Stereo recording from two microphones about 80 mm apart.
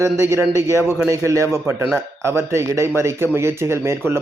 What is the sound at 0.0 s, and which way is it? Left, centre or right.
A man's voice, right.